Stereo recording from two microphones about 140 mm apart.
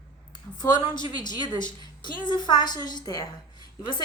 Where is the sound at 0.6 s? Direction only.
30° left (ahead or behind).